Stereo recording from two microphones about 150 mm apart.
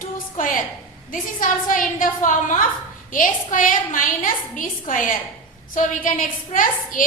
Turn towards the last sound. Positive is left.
turn(degrees=65)  # may be behind; listen again after turning